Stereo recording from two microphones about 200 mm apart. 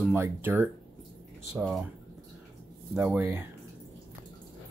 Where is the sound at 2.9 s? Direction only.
10° right (ahead or behind).